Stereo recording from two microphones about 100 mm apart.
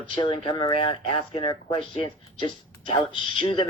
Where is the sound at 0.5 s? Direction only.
55° left (ahead or behind).